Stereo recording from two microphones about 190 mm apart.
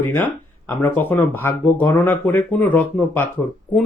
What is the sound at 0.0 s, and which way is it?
Speech, 10° left (ahead or behind).